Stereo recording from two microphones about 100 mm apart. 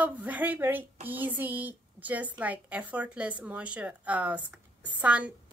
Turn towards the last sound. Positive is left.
turn(degrees=-15)  # may be behind; listen again after turning